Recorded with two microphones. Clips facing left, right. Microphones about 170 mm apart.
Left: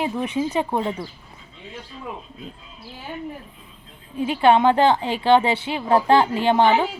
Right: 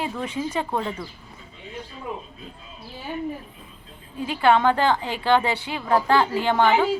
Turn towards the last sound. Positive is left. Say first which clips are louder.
# left 2 dB
turn(degrees=20)  # may be behind; listen again after turning